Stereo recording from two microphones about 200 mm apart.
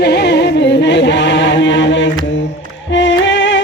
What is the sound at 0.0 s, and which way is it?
Music, 55° left (ahead or behind).